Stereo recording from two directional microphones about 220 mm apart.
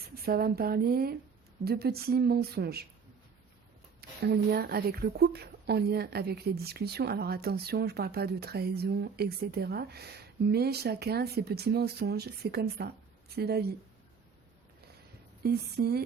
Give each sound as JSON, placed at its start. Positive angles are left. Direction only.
{"t": 0.2, "sound": "a woman's voice", "side_deg": -45}
{"t": 4.2, "sound": "a woman's voice", "side_deg": -45}
{"t": 15.4, "sound": "a woman's voice", "side_deg": -45}